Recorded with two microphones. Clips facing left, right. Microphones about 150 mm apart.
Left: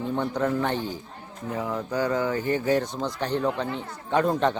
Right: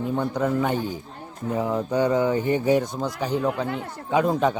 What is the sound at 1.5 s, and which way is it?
A man's voice, 25° right (ahead or behind).